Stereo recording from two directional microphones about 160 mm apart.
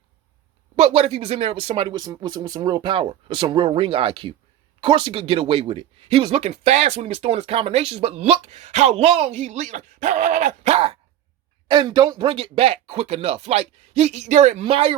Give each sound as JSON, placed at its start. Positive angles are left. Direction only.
{"t": 0.8, "sound": "speech", "side_deg": -40}
{"t": 11.7, "sound": "speech", "side_deg": -30}
{"t": 12.2, "sound": "speech", "side_deg": -35}